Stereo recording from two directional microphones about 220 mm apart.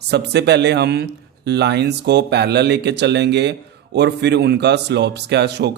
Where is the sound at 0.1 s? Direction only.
50° right (ahead or behind).